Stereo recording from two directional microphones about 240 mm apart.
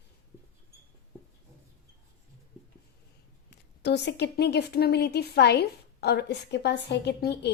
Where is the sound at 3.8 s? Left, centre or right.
Left.